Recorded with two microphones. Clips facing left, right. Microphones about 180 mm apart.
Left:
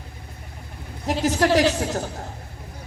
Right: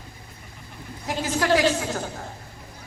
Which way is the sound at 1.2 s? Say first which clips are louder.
Left 2 dB; 40° left (ahead or behind).